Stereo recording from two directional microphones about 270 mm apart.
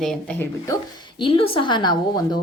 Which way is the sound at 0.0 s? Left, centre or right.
Centre.